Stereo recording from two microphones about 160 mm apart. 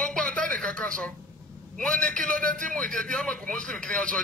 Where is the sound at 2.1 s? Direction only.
55° right (ahead or behind).